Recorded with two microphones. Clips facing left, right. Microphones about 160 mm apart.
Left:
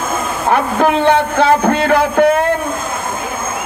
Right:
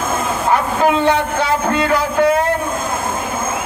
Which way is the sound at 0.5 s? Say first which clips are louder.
Left 2 dB; 55° left (ahead or behind).